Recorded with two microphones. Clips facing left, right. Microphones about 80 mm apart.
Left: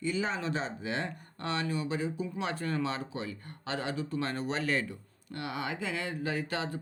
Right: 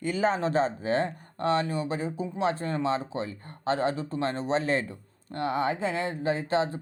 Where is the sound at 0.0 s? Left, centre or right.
Right.